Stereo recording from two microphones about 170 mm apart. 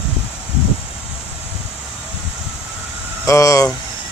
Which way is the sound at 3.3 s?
20° left (ahead or behind).